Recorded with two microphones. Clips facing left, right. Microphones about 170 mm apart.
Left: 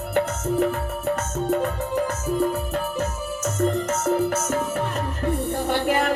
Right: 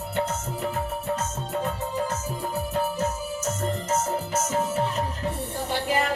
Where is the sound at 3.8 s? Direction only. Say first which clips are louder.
Left 5 dB; 65° left (ahead or behind).